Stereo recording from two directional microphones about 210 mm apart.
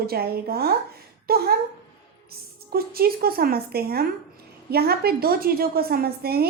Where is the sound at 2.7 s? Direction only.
45° right (ahead or behind).